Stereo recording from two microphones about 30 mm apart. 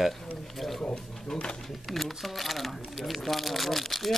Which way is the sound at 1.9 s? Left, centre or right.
Centre.